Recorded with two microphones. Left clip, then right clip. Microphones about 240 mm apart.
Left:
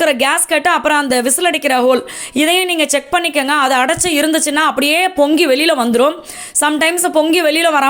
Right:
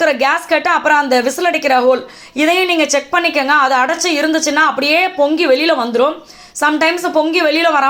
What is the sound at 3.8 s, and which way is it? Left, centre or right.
A woman's voice, left.